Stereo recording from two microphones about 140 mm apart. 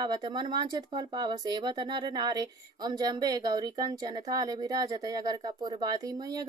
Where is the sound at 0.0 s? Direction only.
30° right (ahead or behind).